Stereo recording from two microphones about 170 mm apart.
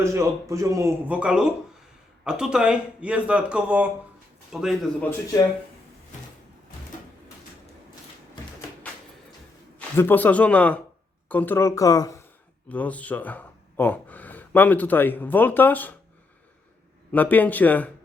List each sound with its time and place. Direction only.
0.0 s a man's voice: 20° right (ahead or behind); by 5.0 s centre (ahead or behind)
9.7 s a man's voice: 10° left (ahead or behind)
12.6 s speech: 10° left (ahead or behind)
17.1 s speech: 10° left (ahead or behind)